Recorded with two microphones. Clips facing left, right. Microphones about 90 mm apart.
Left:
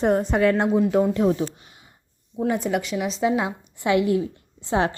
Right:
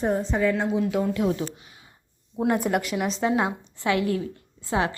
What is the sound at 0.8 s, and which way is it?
Speech, 25° left (ahead or behind).